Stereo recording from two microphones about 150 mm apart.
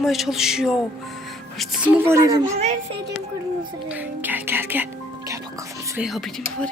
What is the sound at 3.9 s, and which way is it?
Speech, 10° right (ahead or behind).